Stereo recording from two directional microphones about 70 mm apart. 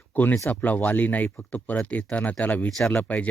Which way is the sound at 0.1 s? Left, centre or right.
Left.